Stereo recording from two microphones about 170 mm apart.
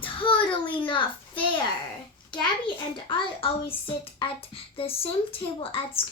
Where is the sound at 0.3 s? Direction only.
30° left (ahead or behind).